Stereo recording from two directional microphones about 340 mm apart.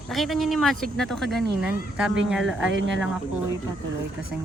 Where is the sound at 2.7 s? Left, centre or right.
Right.